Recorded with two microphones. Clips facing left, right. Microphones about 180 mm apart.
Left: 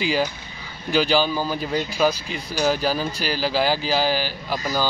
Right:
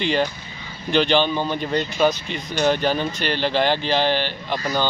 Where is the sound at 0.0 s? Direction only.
5° left (ahead or behind).